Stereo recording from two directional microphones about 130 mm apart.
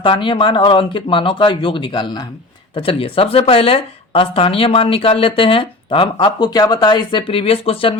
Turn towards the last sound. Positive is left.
turn(degrees=45)  # may be behind; listen again after turning